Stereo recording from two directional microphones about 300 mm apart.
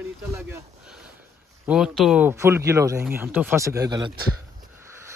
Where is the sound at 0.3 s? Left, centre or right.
Centre.